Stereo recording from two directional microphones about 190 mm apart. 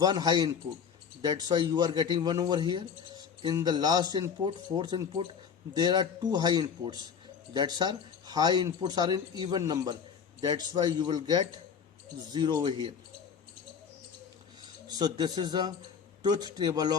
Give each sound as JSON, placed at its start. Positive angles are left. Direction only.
{"t": 0.0, "sound": "speech", "side_deg": -20}
{"t": 14.8, "sound": "speech", "side_deg": -20}